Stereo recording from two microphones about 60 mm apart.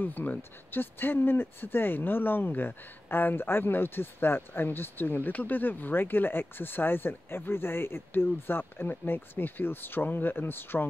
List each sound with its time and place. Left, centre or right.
0.0 s speech: left